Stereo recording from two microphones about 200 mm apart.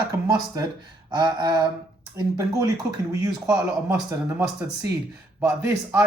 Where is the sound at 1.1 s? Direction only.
20° right (ahead or behind).